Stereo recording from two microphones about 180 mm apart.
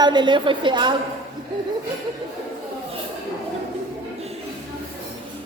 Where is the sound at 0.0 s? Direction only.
25° right (ahead or behind).